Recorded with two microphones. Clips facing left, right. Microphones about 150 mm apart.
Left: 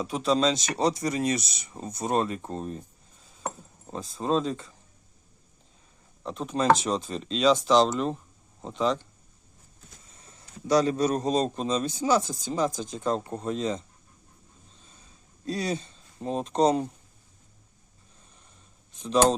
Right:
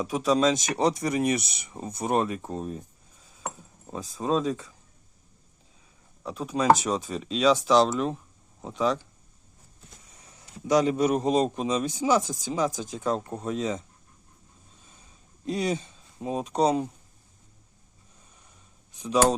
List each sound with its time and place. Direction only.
0.0 s speech: 10° right (ahead or behind)
3.4 s keys jangling: 5° right (ahead or behind)
6.2 s speech: 5° right (ahead or behind)
10.2 s speech: 15° right (ahead or behind)
13.2 s speech: centre (ahead or behind)
15.4 s speech: 20° right (ahead or behind)
19.0 s speech: 10° right (ahead or behind)